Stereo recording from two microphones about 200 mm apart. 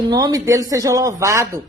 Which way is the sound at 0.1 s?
20° right (ahead or behind).